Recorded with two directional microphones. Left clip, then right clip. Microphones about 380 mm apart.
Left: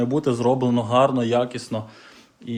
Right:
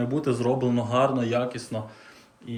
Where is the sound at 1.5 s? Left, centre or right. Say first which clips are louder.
Left 3 dB; left.